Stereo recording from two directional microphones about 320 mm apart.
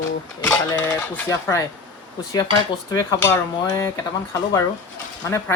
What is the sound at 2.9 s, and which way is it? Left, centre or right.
Speech, centre.